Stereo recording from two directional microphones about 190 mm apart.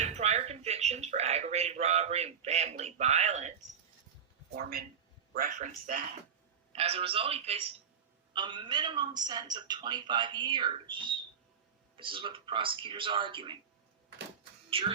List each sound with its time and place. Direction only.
0.0 s a sound: 35° right (ahead or behind)
4.5 s a man's voice: 55° right (ahead or behind)
6.7 s a man's voice: 30° right (ahead or behind)
14.7 s speech: 30° right (ahead or behind)